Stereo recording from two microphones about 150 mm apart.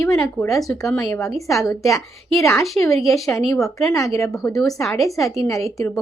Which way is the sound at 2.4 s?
Centre (ahead or behind).